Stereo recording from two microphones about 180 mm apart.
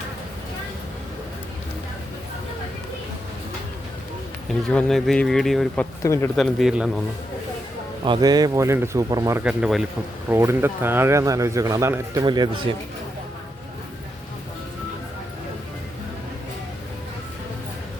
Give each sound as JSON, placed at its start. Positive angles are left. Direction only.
{"t": 4.7, "sound": "speech", "side_deg": 5}
{"t": 6.3, "sound": "speech", "side_deg": 0}
{"t": 8.0, "sound": "speech", "side_deg": -25}
{"t": 9.4, "sound": "speech", "side_deg": -5}
{"t": 10.2, "sound": "a man's voice", "side_deg": -15}